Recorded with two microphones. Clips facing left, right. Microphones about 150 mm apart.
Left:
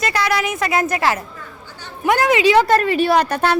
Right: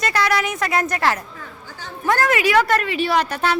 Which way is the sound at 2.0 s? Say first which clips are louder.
Left 4 dB; 15° left (ahead or behind).